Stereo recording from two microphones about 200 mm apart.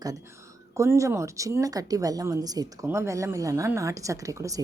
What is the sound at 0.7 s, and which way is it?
A woman's voice, 15° right (ahead or behind).